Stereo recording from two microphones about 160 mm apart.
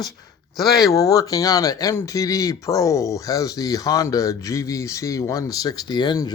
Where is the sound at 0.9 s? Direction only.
20° left (ahead or behind).